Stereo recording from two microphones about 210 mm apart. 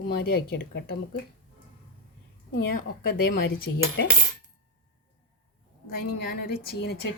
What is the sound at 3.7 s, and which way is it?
Cutlery, 55° left (ahead or behind).